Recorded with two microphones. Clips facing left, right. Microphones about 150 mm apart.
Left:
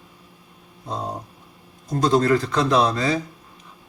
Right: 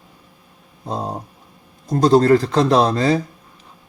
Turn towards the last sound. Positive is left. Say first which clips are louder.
# right 4 dB
turn(degrees=-35)  # may be behind; listen again after turning